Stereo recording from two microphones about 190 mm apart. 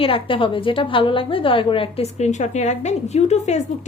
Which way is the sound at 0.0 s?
30° left (ahead or behind).